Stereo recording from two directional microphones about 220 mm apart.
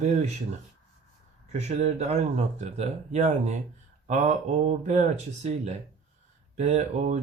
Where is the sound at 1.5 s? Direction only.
30° right (ahead or behind).